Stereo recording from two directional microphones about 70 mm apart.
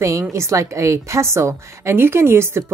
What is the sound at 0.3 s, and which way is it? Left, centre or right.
A woman's voice, right.